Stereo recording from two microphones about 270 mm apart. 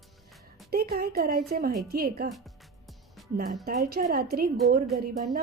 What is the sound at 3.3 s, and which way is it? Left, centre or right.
A woman's voice, right.